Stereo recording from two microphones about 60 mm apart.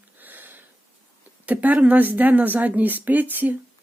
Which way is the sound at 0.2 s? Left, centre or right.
Right.